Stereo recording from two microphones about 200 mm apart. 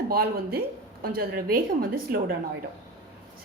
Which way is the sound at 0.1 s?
50° right (ahead or behind).